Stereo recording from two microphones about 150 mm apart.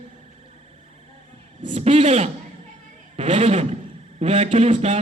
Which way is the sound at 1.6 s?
45° right (ahead or behind).